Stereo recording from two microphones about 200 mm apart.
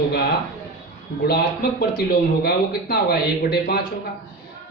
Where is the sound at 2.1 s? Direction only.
50° left (ahead or behind).